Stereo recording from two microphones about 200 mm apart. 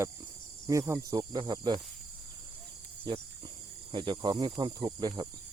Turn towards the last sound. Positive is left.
turn(degrees=-20)  # may be behind; listen again after turning